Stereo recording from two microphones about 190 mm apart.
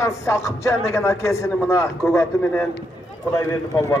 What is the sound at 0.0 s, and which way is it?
A man's voice, 15° left (ahead or behind).